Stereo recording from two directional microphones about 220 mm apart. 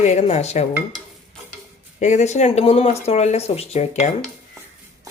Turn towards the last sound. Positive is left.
turn(degrees=30)  # may be behind; listen again after turning